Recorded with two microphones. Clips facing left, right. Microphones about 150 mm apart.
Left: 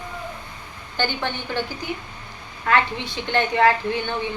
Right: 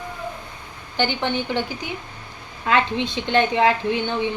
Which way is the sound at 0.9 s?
15° right (ahead or behind).